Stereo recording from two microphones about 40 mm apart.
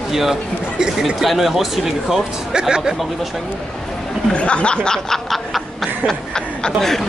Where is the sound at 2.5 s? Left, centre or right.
Right.